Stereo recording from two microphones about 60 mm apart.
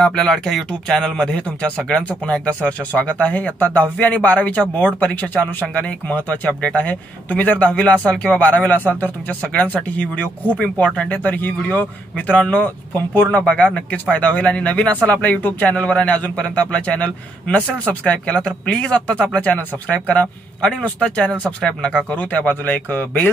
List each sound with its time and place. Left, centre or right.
0.0 s speech: centre
11.1 s speech: left
13.4 s speech: left
22.1 s speech: left